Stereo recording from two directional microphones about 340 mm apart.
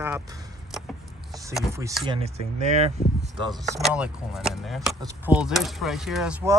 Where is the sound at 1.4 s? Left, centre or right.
Centre.